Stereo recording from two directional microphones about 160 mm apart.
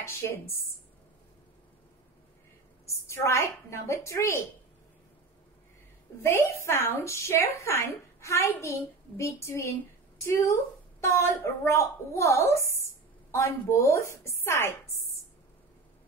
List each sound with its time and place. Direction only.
0.0 s a woman's voice: 15° left (ahead or behind)
2.9 s a woman's voice: 15° left (ahead or behind)
6.2 s a woman's voice: 15° left (ahead or behind)